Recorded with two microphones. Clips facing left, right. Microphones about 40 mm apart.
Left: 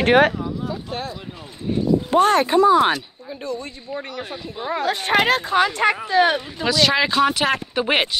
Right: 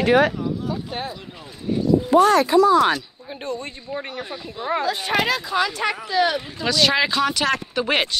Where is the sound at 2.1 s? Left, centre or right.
Left.